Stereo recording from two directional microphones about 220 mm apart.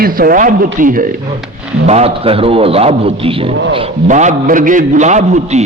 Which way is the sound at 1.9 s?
30° right (ahead or behind).